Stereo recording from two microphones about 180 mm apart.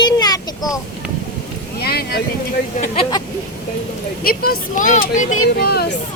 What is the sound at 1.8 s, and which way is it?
Speech, 60° left (ahead or behind).